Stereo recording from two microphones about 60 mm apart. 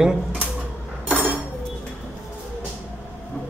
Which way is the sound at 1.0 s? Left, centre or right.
Right.